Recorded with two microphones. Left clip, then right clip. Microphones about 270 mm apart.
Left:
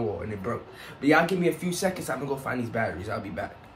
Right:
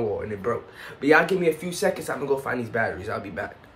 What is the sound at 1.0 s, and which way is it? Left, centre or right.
Speech, centre.